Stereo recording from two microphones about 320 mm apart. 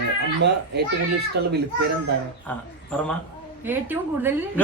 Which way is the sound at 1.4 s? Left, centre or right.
Right.